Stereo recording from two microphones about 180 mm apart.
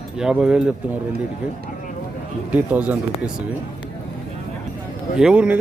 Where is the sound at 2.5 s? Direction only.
10° right (ahead or behind).